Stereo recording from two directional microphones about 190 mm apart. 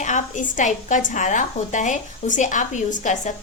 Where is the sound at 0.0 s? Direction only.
40° left (ahead or behind).